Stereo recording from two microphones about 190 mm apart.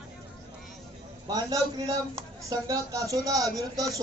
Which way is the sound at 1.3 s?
20° right (ahead or behind).